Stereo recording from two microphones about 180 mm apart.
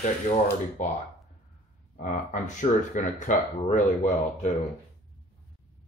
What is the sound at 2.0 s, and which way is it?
Speech, 45° left (ahead or behind).